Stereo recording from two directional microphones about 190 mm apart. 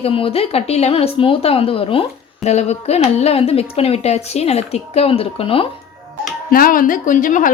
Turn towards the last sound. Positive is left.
turn(degrees=45)  # may be behind; listen again after turning